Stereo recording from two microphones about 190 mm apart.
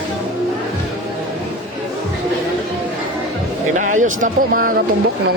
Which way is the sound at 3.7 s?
40° right (ahead or behind).